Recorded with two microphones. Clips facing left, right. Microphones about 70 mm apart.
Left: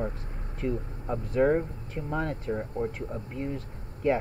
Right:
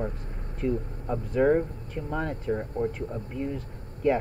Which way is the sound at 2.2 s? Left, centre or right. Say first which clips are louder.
Right 2 dB; centre.